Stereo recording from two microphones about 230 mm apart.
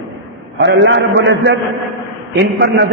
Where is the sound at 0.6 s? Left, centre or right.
Right.